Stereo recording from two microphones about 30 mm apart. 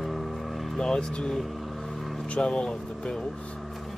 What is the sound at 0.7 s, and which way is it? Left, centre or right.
Speech, left.